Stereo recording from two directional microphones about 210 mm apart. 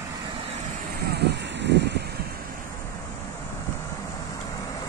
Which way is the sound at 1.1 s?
55° right (ahead or behind).